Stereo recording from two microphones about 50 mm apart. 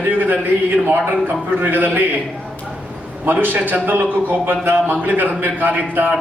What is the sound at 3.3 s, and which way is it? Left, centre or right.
A man's voice, right.